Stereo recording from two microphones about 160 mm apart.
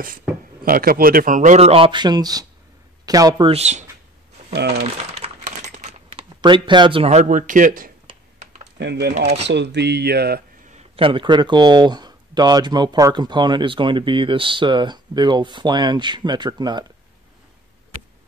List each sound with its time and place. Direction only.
0.7 s a man's voice: 65° right (ahead or behind); by 3.4 s 25° right (ahead or behind)
3.4 s a man's voice: 40° right (ahead or behind)
4.6 s speech: 90° right
4.8 s coin: 40° right (ahead or behind)
6.4 s speech: 30° right (ahead or behind)
7.1 s speech: 50° right (ahead or behind)
8.7 s speech: 90° right
9.1 s speech: 40° right (ahead or behind)
9.5 s speech: 90° right
10.7 s speech: 40° right (ahead or behind)